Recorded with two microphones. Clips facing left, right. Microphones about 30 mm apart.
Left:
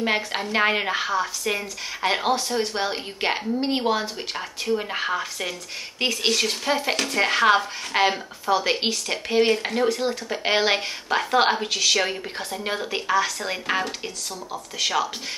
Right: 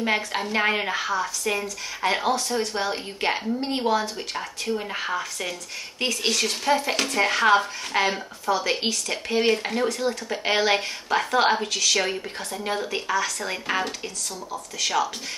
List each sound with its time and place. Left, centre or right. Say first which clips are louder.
0.0 s speech: even; centre
2.2 s speech: left 1 dB; centre